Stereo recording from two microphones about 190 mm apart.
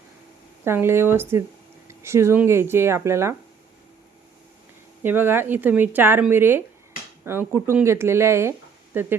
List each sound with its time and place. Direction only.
0.6 s speech: 10° right (ahead or behind)
5.0 s speech: 10° right (ahead or behind)